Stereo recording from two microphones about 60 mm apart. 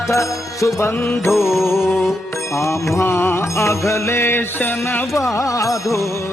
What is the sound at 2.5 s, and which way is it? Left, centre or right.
Music, left.